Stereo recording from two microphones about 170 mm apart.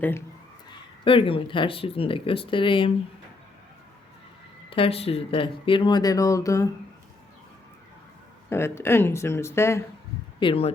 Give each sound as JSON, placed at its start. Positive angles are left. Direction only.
{"t": 1.0, "sound": "speech", "side_deg": 30}
{"t": 4.7, "sound": "speech", "side_deg": 35}
{"t": 8.4, "sound": "speech", "side_deg": 15}
{"t": 10.4, "sound": "speech", "side_deg": 35}